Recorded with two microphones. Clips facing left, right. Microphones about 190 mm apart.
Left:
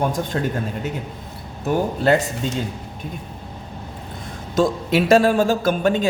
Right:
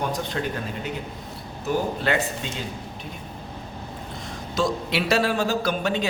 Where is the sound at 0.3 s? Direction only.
45° left (ahead or behind).